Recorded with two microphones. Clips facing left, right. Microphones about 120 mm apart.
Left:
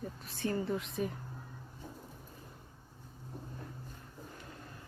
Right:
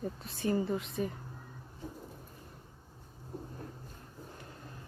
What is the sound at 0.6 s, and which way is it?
Speech, centre (ahead or behind).